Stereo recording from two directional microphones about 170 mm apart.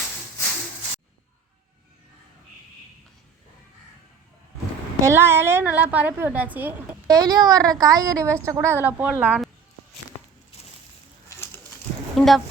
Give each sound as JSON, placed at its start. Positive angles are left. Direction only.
{"t": 5.0, "sound": "a woman's voice", "side_deg": -15}
{"t": 7.1, "sound": "a woman's voice", "side_deg": -25}
{"t": 11.3, "sound": "a sound", "side_deg": 15}
{"t": 12.1, "sound": "speech", "side_deg": 0}